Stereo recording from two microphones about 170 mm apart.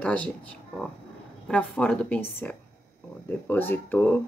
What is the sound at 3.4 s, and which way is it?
Speech, 10° left (ahead or behind).